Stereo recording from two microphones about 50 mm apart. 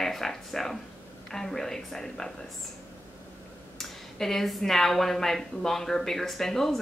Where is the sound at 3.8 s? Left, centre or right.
Centre.